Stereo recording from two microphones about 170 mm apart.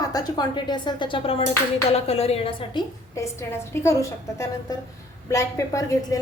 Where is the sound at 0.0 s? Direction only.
20° left (ahead or behind).